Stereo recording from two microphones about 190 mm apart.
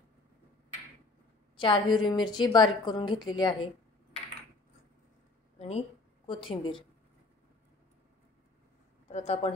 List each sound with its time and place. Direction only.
1.6 s a woman's voice: 25° left (ahead or behind)
5.6 s a sound: 30° left (ahead or behind)
6.5 s a woman's voice: 25° left (ahead or behind)
9.1 s speech: 35° left (ahead or behind)